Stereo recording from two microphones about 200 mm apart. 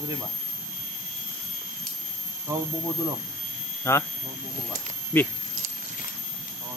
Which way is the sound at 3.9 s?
15° left (ahead or behind).